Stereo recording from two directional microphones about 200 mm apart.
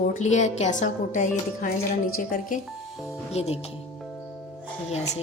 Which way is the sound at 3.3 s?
30° left (ahead or behind).